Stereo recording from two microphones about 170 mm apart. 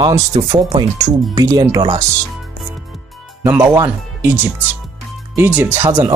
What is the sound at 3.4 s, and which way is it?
Speech, 10° right (ahead or behind).